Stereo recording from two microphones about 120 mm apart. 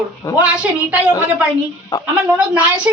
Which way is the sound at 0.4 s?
10° right (ahead or behind).